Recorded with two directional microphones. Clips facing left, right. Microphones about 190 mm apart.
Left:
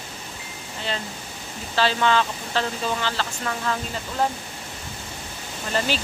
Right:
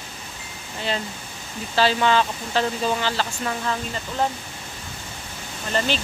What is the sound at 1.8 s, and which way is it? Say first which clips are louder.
Speech: right 2 dB; 15° right (ahead or behind).